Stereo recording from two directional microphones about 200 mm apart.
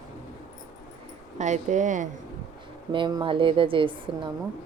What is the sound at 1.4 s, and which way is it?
Speech, 35° right (ahead or behind).